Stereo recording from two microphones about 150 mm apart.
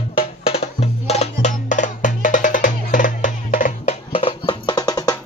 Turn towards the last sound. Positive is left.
turn(degrees=25)  # may be behind; listen again after turning